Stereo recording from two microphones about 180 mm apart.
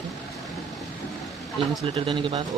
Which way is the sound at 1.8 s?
30° right (ahead or behind).